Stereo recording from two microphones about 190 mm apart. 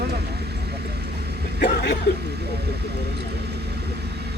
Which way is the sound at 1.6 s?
65° left (ahead or behind).